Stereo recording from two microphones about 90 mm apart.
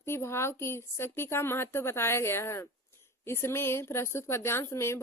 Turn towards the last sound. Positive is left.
turn(degrees=30)  # may be behind; listen again after turning